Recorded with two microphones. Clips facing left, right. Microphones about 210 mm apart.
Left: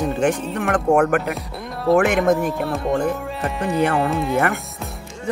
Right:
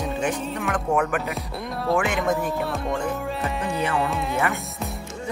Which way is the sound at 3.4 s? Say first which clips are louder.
Left 8 dB; centre (ahead or behind).